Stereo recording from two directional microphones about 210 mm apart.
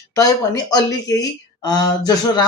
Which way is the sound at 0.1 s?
15° left (ahead or behind).